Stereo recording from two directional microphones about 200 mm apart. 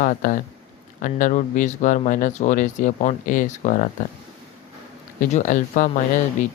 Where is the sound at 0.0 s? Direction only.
45° left (ahead or behind).